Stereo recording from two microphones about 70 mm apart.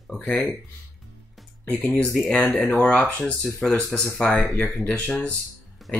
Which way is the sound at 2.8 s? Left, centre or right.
Centre.